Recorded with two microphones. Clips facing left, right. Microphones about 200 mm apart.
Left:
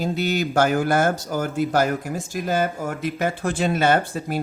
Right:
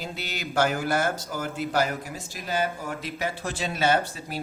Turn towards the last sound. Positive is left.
turn(degrees=50)  # may be behind; listen again after turning